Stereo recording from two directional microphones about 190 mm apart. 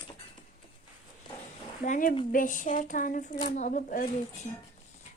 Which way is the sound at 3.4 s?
40° left (ahead or behind).